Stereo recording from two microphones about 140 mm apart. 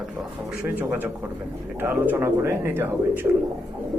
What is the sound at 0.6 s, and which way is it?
A man's voice, 15° right (ahead or behind).